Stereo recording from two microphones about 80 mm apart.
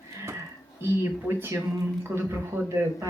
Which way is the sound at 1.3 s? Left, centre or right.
Right.